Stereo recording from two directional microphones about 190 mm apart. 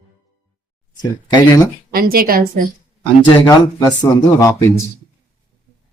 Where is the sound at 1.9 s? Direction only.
50° right (ahead or behind).